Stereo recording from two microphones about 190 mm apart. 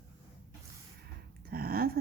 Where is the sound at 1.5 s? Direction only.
50° right (ahead or behind).